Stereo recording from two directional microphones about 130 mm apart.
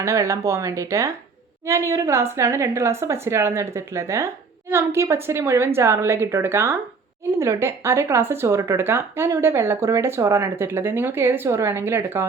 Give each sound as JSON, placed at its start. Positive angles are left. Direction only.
{"t": 0.0, "sound": "speech", "side_deg": -25}